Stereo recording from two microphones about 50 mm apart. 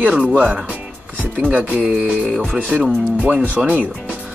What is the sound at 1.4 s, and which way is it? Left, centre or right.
Speech, right.